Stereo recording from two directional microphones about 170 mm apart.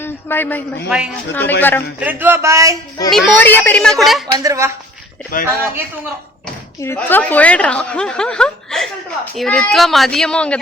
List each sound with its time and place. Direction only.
0.0 s a sound: 10° left (ahead or behind)
0.9 s speech: 5° right (ahead or behind)
1.3 s speech: 10° left (ahead or behind)
2.0 s speech: 10° right (ahead or behind)
3.1 s speech: centre (ahead or behind)
4.3 s speech: 20° right (ahead or behind)
5.3 s a man's voice: 55° left (ahead or behind)
6.8 s speech: 10° left (ahead or behind)